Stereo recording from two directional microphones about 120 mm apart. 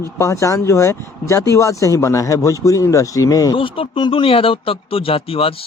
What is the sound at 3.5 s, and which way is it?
Speech, 50° left (ahead or behind).